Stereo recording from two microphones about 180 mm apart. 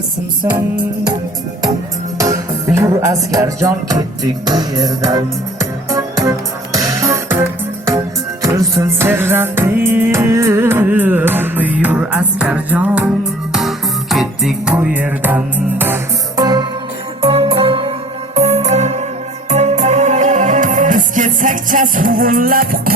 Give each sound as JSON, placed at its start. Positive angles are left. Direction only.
{"t": 2.1, "sound": "music", "side_deg": -20}
{"t": 16.4, "sound": "music", "side_deg": -20}